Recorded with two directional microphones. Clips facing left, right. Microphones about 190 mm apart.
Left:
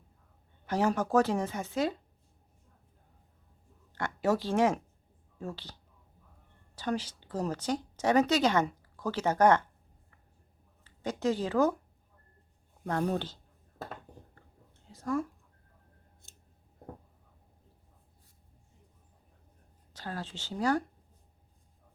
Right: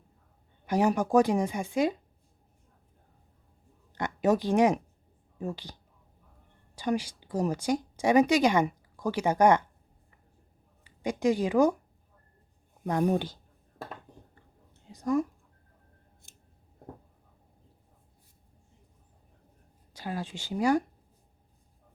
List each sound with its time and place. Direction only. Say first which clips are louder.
0.6 s a woman's voice: right 3 dB; 15° right (ahead or behind)
3.9 s a woman's voice: right 3 dB; 15° right (ahead or behind)
10.8 s speech: right 4 dB; 15° right (ahead or behind)
12.8 s speech: right 4 dB; 15° right (ahead or behind)
14.8 s a sound: right 5 dB; 15° right (ahead or behind)
16.3 s scissors: right 2 dB; 15° right (ahead or behind)
19.9 s a woman's voice: right 4 dB; 10° right (ahead or behind)